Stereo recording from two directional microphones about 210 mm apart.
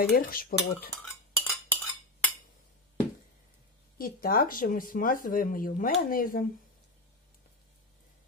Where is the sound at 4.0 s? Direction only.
45° left (ahead or behind).